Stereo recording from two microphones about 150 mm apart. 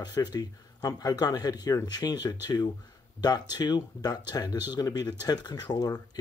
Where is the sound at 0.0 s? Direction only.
25° left (ahead or behind).